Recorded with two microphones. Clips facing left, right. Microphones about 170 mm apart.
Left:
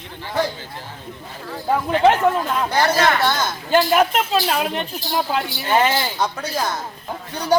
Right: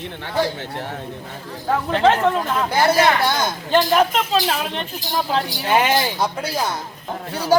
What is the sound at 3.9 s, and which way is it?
Speech, 10° left (ahead or behind).